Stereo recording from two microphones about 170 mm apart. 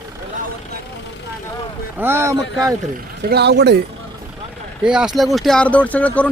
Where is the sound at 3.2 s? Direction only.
80° right.